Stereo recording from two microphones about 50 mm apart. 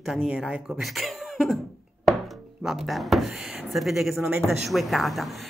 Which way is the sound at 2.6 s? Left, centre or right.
Centre.